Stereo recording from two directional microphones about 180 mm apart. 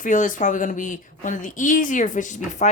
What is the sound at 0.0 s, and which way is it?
Speech, 45° left (ahead or behind).